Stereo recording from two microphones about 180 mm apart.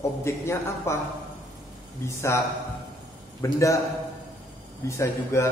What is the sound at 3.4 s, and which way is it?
Speech, 15° left (ahead or behind).